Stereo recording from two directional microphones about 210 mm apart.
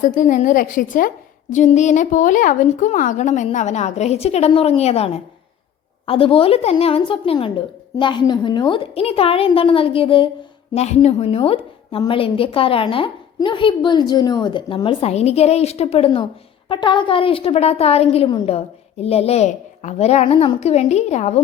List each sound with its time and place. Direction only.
0.0 s a woman's voice: 40° left (ahead or behind)